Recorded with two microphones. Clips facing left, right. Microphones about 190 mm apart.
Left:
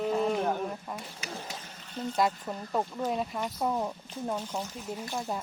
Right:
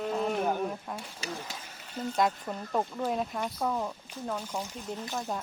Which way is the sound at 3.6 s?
15° left (ahead or behind).